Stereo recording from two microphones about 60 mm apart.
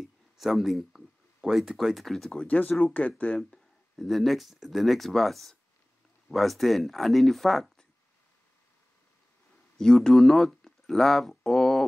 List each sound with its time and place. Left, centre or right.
0.0 s speech: centre
2.3 s speech: left
3.3 s speech: centre
9.8 s speech: centre